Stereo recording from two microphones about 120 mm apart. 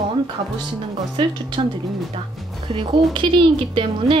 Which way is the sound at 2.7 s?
45° right (ahead or behind).